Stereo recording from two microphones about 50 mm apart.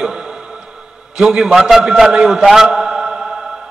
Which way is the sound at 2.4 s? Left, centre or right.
Centre.